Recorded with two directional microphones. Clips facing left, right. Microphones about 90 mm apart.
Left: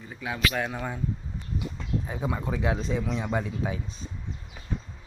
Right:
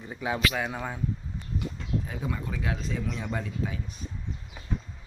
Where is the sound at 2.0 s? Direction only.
25° left (ahead or behind).